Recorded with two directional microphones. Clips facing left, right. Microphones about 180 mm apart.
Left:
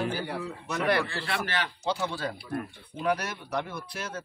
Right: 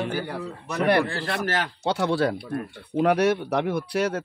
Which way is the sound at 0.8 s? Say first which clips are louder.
Right 6 dB; 55° right (ahead or behind).